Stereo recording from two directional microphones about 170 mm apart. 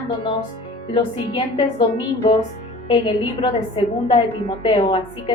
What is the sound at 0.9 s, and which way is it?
A woman's voice, 30° left (ahead or behind).